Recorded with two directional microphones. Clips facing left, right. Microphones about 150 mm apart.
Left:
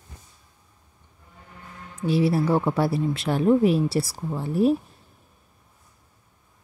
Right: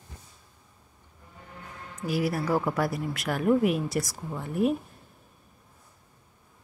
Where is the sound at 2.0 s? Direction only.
30° left (ahead or behind).